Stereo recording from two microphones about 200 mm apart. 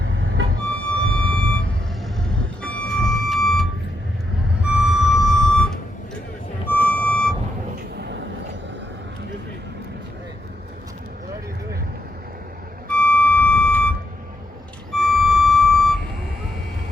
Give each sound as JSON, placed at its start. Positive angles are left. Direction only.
{"t": 0.2, "sound": "music", "side_deg": -70}
{"t": 1.2, "sound": "vehicle", "side_deg": 5}
{"t": 2.6, "sound": "music", "side_deg": 5}
{"t": 7.9, "sound": "a sound", "side_deg": -55}
{"t": 12.9, "sound": "music", "side_deg": 5}
{"t": 14.9, "sound": "music", "side_deg": 0}